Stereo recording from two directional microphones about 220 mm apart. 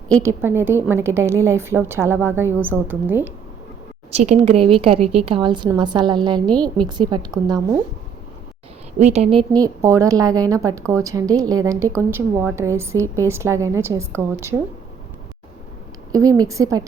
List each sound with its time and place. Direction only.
0.2 s a woman's voice: 10° right (ahead or behind)
4.1 s a woman's voice: 30° right (ahead or behind)
6.5 s a woman's voice: 5° left (ahead or behind)
6.8 s a woman's voice: 20° right (ahead or behind)
9.0 s a woman's voice: 30° right (ahead or behind); by 14.5 s 10° right (ahead or behind)
16.1 s a woman's voice: 15° right (ahead or behind)